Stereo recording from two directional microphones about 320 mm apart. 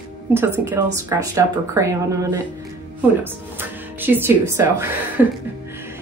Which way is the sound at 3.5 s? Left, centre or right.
Centre.